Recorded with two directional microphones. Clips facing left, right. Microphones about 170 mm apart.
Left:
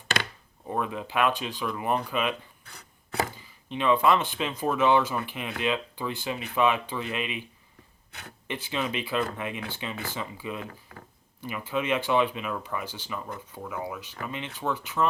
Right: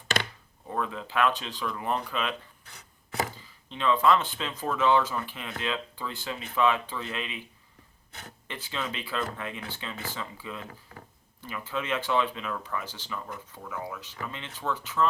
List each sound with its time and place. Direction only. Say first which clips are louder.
0.7 s speech: left 2 dB; 15° left (ahead or behind)
2.7 s chopping: left 2 dB; 60° left (ahead or behind)
3.7 s speech: left 1 dB; 15° left (ahead or behind)
8.4 s speech: left 5 dB; 15° left (ahead or behind)